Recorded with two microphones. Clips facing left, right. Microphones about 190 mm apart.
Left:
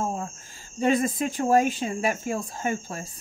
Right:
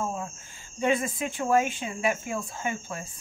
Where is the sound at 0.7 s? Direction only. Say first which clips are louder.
Left 3 dB; 40° left (ahead or behind).